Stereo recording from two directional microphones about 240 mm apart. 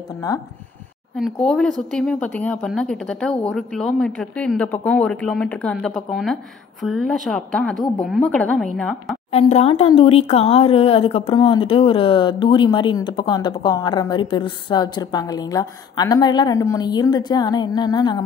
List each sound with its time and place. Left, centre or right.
1.1 s speech: centre
9.3 s speech: left